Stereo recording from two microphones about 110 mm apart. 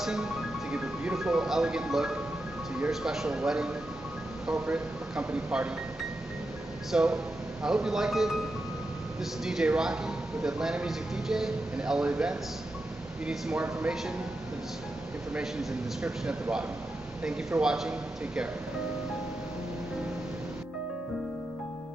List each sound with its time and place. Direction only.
0.0 s a man's voice: 5° right (ahead or behind)
6.9 s a man's voice: 5° right (ahead or behind)
16.0 s speech: 10° right (ahead or behind)